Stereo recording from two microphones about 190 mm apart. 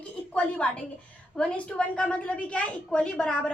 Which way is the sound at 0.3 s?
5° left (ahead or behind).